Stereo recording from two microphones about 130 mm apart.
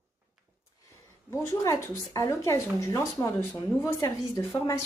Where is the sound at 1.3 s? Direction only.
25° left (ahead or behind).